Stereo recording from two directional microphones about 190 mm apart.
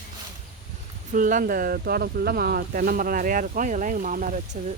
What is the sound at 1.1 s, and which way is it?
Speech, 45° right (ahead or behind).